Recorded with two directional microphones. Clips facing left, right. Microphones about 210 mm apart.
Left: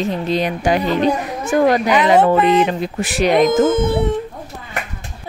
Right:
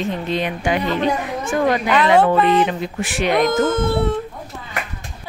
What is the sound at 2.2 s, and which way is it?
Speech, 20° left (ahead or behind).